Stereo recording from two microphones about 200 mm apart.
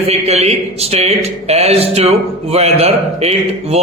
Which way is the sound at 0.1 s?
30° right (ahead or behind).